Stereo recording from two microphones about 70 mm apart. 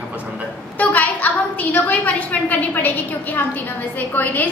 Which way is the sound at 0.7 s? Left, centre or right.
Left.